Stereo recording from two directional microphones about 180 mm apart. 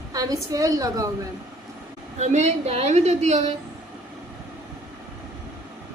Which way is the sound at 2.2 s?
40° right (ahead or behind).